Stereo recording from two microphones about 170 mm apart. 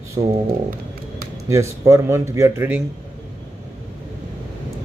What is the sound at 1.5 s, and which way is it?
A man's voice, 15° right (ahead or behind).